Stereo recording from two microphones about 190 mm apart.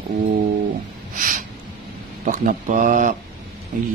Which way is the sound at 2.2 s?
45° right (ahead or behind).